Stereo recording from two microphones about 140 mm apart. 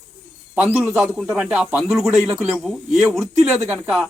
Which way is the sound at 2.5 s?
Centre (ahead or behind).